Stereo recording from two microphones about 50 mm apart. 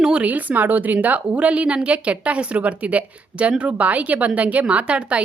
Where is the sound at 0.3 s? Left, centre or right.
Right.